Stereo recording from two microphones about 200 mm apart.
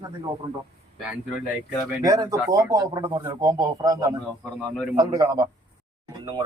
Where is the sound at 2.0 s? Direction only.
20° right (ahead or behind).